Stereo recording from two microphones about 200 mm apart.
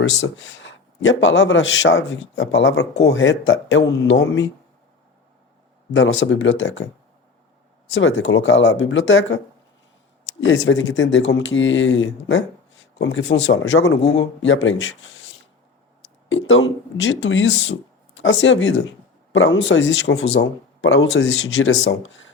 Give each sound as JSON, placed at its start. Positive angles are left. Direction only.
{"t": 0.2, "sound": "a man's voice", "side_deg": 75}
{"t": 5.9, "sound": "a man's voice", "side_deg": 70}
{"t": 7.9, "sound": "a man's voice", "side_deg": 70}
{"t": 10.4, "sound": "a man's voice", "side_deg": 70}